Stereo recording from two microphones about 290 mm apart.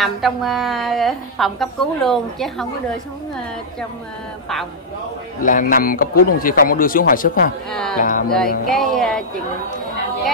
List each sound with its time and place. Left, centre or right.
0.0 s a woman's voice: centre
5.4 s speech: left
7.7 s a woman's voice: centre
8.0 s speech: left
8.6 s a woman's voice: centre